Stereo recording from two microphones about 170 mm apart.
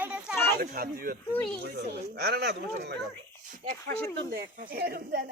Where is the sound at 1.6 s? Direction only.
70° right (ahead or behind).